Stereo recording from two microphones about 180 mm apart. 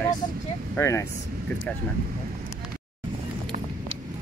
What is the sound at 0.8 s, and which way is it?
Speech, 15° left (ahead or behind).